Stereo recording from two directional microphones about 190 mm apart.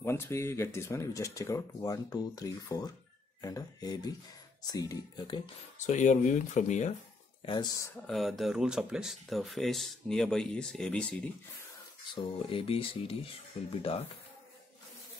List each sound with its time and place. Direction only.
0.0 s speech: 15° left (ahead or behind)
5.9 s speech: 40° left (ahead or behind)
7.4 s speech: 20° left (ahead or behind)
8.1 s speech: centre (ahead or behind)
12.4 s speech: 30° left (ahead or behind)